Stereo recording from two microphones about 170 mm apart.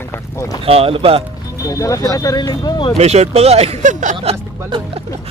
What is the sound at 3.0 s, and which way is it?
Speech, 40° right (ahead or behind).